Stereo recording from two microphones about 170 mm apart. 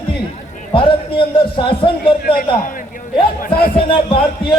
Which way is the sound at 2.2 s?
55° left (ahead or behind).